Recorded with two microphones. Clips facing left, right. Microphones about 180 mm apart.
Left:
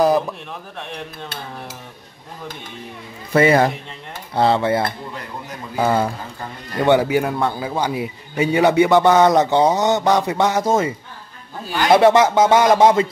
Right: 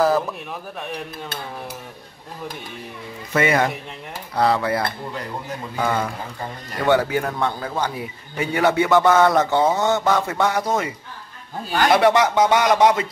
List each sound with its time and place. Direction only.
3.3 s a man's voice: 35° left (ahead or behind)
6.8 s a man's voice: 15° left (ahead or behind)
11.9 s speech: 25° left (ahead or behind)